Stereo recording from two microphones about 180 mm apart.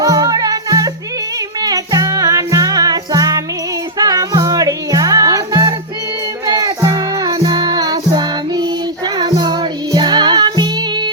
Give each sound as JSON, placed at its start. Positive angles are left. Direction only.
{"t": 0.0, "sound": "music", "side_deg": -20}